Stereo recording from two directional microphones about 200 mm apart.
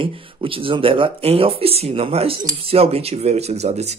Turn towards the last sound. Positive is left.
turn(degrees=-35)  # may be behind; listen again after turning